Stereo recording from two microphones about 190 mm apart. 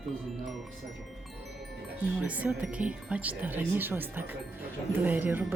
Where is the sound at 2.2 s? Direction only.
5° right (ahead or behind).